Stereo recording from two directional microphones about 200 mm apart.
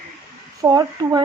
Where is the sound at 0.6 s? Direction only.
20° right (ahead or behind).